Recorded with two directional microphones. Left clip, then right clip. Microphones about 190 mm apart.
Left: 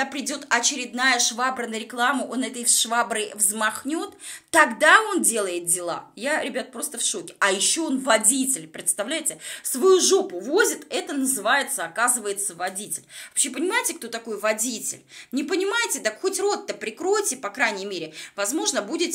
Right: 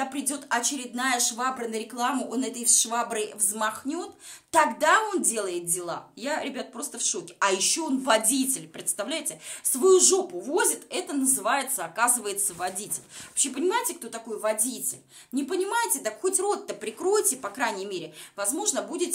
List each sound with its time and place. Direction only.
0.0 s a woman's voice: 20° left (ahead or behind)